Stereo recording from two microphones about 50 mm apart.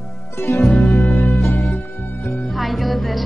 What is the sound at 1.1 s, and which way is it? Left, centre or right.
Music, left.